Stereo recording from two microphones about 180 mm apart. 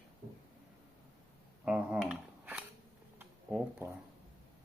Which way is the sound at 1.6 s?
5° right (ahead or behind).